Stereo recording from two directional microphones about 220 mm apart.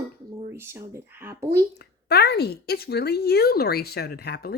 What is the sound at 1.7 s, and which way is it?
Speech, 45° left (ahead or behind).